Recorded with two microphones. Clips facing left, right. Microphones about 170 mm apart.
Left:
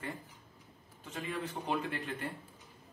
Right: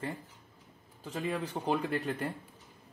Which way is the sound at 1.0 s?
35° right (ahead or behind).